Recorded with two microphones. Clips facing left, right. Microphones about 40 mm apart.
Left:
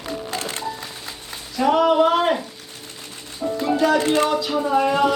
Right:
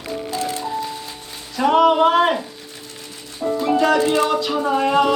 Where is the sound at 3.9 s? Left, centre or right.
Left.